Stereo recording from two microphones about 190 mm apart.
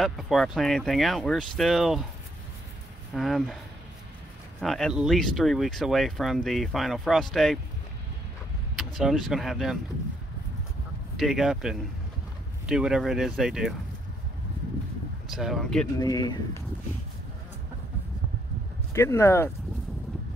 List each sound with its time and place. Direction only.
0.0 s speech: centre (ahead or behind)
3.1 s speech: centre (ahead or behind)
4.6 s speech: centre (ahead or behind)
8.7 s speech: centre (ahead or behind)
11.1 s speech: centre (ahead or behind)
15.3 s speech: centre (ahead or behind)
16.0 s speech: 20° left (ahead or behind)
18.9 s speech: 15° left (ahead or behind)